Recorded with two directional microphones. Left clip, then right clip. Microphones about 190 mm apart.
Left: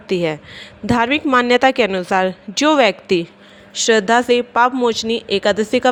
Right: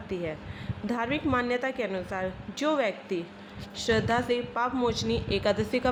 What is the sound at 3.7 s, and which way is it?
A woman's voice, 40° left (ahead or behind).